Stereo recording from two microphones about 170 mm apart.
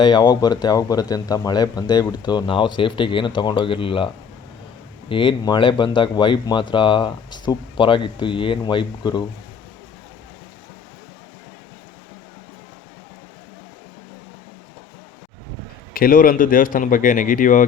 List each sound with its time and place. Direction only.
0.0 s speech: 25° left (ahead or behind)
15.9 s speech: 60° left (ahead or behind)